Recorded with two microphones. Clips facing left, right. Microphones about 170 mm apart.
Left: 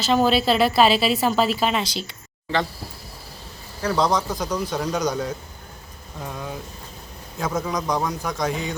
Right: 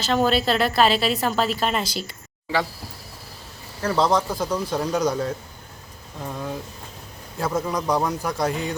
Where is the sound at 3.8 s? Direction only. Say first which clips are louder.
Right 1 dB; 5° right (ahead or behind).